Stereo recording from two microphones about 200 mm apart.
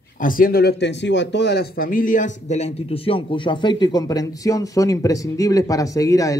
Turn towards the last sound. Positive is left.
turn(degrees=15)  # may be behind; listen again after turning